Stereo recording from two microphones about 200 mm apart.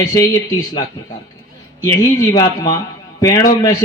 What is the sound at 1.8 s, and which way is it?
Speech, 20° left (ahead or behind).